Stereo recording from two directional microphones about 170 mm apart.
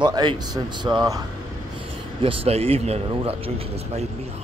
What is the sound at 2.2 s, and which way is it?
Speech, 35° right (ahead or behind).